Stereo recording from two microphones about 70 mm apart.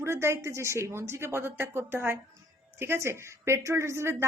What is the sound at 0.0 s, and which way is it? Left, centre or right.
A woman's voice, right.